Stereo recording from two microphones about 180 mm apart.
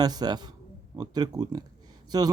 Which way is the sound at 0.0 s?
20° right (ahead or behind).